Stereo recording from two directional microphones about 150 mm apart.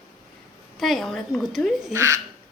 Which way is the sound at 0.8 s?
Centre (ahead or behind).